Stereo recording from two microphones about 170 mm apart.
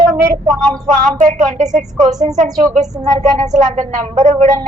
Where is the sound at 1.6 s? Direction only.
45° right (ahead or behind).